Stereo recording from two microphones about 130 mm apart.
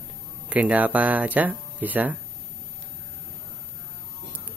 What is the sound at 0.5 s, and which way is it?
Speech, 10° right (ahead or behind).